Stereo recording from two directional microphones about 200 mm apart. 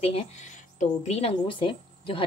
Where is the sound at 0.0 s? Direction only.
30° left (ahead or behind).